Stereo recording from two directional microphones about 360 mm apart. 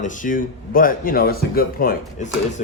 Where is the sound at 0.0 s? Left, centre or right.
Left.